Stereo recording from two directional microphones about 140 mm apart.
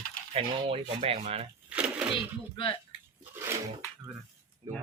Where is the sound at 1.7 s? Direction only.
10° right (ahead or behind).